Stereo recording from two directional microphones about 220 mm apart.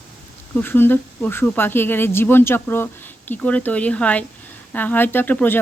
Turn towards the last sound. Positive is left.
turn(degrees=10)  # may be behind; listen again after turning